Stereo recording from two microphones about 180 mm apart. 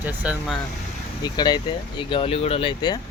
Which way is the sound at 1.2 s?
25° left (ahead or behind).